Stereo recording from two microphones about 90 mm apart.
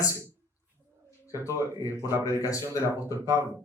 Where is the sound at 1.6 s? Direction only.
40° left (ahead or behind).